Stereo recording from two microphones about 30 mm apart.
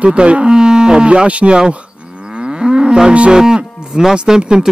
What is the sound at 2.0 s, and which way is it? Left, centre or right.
Moo, right.